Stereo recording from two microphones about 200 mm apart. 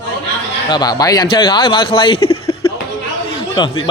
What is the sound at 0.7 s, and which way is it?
Speech, 20° left (ahead or behind).